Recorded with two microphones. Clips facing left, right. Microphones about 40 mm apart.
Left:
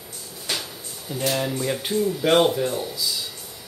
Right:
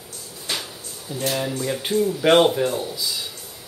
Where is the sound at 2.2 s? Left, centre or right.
Right.